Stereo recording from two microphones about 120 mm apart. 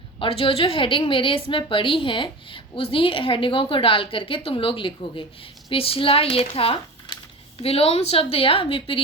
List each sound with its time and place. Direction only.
0.2 s a woman's voice: 45° left (ahead or behind)